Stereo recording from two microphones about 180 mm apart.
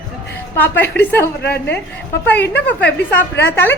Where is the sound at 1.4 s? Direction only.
65° left (ahead or behind).